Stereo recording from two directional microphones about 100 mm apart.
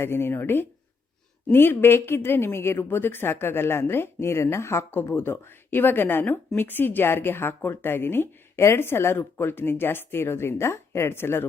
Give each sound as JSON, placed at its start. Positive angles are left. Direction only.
{"t": 0.0, "sound": "a woman's voice", "side_deg": 25}